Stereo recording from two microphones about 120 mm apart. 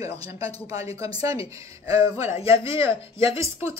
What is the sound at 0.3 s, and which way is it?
Speech, 25° right (ahead or behind).